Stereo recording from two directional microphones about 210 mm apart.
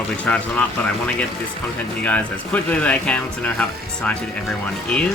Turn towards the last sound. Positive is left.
turn(degrees=5)  # may be behind; listen again after turning